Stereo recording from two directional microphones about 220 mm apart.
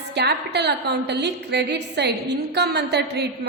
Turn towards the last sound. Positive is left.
turn(degrees=-50)  # may be behind; listen again after turning